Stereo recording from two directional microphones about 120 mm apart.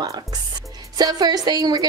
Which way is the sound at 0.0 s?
30° right (ahead or behind).